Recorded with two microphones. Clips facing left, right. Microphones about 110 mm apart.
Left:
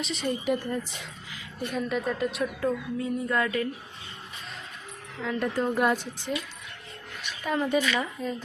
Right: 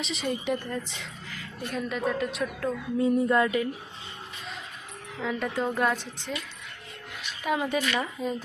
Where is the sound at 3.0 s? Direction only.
20° right (ahead or behind).